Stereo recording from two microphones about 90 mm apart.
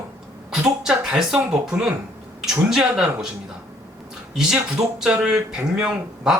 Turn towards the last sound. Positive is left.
turn(degrees=-10)  # may be behind; listen again after turning